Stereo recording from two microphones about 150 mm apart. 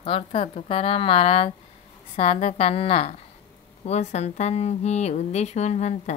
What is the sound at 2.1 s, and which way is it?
Speech, 45° left (ahead or behind).